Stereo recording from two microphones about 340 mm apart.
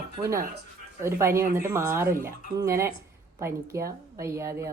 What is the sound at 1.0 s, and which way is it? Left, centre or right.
A woman's voice, centre.